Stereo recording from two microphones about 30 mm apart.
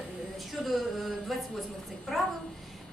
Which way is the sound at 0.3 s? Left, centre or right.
Centre.